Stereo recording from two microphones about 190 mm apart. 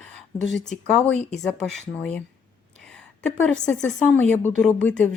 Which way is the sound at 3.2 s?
5° left (ahead or behind).